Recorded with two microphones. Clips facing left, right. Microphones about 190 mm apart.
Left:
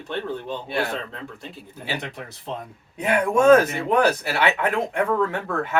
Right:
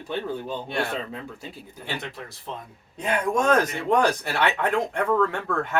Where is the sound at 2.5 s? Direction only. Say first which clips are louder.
Left 4 dB; 20° left (ahead or behind).